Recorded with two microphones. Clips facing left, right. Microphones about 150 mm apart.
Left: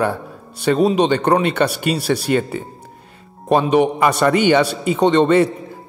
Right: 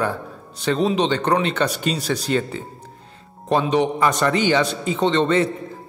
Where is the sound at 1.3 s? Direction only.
55° left (ahead or behind).